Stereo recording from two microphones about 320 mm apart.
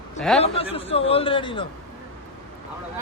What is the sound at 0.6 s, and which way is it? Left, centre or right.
Speech, centre.